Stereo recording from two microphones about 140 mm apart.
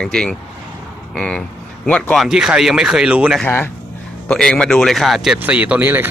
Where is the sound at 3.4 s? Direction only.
15° left (ahead or behind).